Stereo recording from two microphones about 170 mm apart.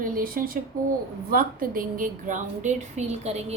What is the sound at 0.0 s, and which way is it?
A woman's voice, 55° right (ahead or behind).